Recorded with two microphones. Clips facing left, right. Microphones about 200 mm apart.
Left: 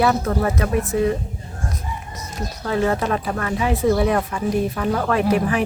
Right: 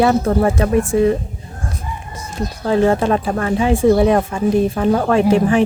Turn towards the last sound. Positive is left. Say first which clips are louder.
# right 6 dB
turn(degrees=-25)  # may be behind; listen again after turning